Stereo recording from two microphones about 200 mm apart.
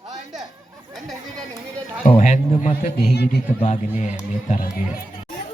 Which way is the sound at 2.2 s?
40° left (ahead or behind).